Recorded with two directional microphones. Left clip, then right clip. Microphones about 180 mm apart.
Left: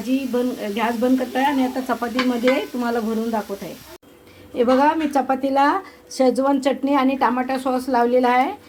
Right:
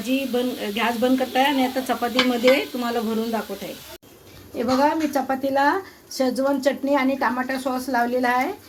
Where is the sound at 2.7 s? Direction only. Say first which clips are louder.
Left 2 dB; 35° left (ahead or behind).